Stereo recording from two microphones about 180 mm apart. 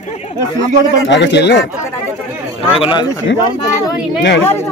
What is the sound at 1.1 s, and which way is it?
Speech, 75° left (ahead or behind).